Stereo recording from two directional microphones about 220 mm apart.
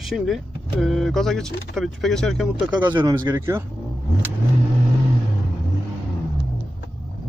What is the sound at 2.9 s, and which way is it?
Speech, 20° right (ahead or behind).